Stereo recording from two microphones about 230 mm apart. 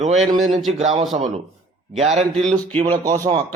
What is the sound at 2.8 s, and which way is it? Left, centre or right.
Speech, right.